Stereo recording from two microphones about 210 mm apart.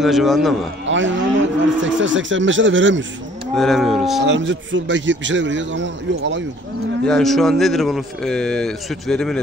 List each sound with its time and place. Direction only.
0.0 s speech: centre (ahead or behind)
0.8 s speech: 60° right (ahead or behind)
3.5 s speech: centre (ahead or behind)
4.2 s speech: 60° right (ahead or behind)
7.1 s speech: centre (ahead or behind)